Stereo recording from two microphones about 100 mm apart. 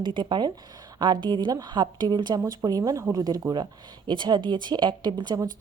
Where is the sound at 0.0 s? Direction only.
50° right (ahead or behind).